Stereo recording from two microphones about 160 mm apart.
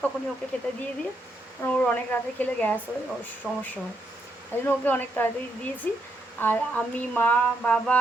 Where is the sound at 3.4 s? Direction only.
5° left (ahead or behind).